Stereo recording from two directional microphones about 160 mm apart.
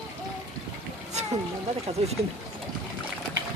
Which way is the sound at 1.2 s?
45° right (ahead or behind).